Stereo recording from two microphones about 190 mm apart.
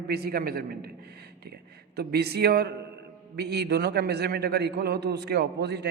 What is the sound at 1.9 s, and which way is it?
A man's voice, 60° right (ahead or behind).